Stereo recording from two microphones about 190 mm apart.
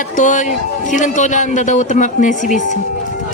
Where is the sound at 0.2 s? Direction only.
40° left (ahead or behind).